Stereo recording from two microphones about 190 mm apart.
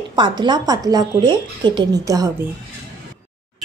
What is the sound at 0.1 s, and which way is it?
A woman's voice, 25° right (ahead or behind).